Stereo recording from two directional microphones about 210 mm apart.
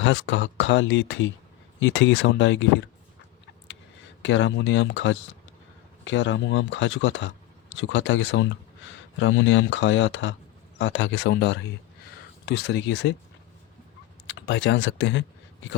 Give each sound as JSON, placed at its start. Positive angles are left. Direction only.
{"t": 0.0, "sound": "speech", "side_deg": 60}
{"t": 4.2, "sound": "speech", "side_deg": 60}
{"t": 14.3, "sound": "speech", "side_deg": 60}